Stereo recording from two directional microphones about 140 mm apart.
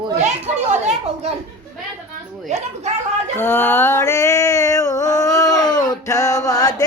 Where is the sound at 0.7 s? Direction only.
55° right (ahead or behind).